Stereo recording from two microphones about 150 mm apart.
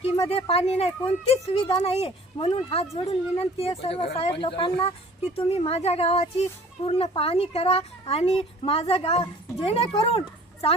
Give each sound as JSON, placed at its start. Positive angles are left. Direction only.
{"t": 0.0, "sound": "speech", "side_deg": 40}